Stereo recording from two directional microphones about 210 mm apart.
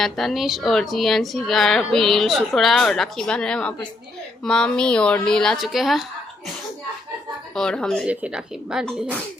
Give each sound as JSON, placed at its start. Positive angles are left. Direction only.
{"t": 0.0, "sound": "a woman's voice", "side_deg": 0}
{"t": 7.5, "sound": "a woman's voice", "side_deg": 5}